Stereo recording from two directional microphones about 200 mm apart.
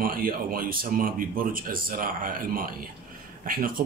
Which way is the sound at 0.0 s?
45° right (ahead or behind).